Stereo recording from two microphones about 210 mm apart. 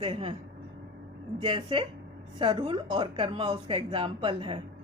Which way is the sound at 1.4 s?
25° right (ahead or behind).